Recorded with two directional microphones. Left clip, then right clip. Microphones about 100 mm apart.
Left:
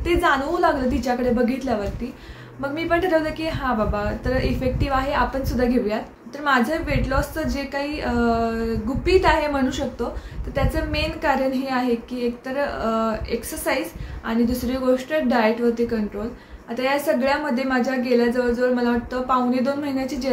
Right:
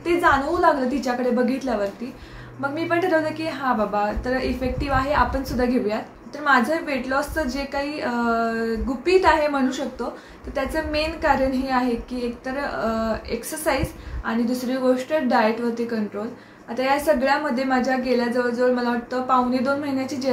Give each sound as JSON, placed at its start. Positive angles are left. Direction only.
{"t": 0.0, "sound": "a woman's voice", "side_deg": 10}